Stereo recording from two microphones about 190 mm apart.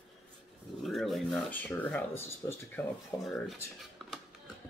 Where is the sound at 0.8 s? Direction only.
Centre (ahead or behind); by 3.3 s 20° left (ahead or behind).